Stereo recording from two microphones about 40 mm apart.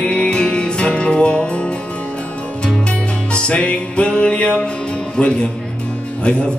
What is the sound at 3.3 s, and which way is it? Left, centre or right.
Music, left.